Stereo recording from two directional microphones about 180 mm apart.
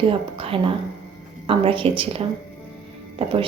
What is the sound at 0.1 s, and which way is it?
A woman's voice, 30° right (ahead or behind).